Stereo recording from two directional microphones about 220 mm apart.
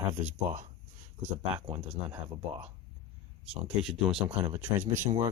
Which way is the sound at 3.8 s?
Centre (ahead or behind).